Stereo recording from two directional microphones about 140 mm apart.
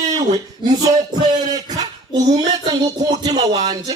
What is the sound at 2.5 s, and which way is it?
Music, 30° right (ahead or behind).